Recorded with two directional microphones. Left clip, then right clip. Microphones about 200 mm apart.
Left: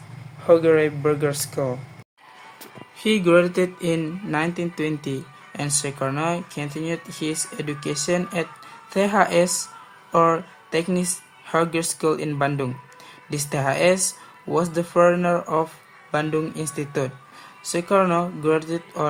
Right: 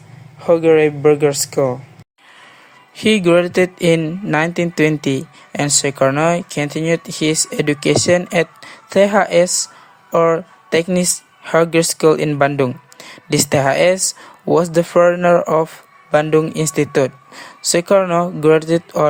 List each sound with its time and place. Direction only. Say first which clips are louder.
0.4 s speech: right 5 dB; 30° right (ahead or behind)
2.9 s speech: right 5 dB; 35° right (ahead or behind)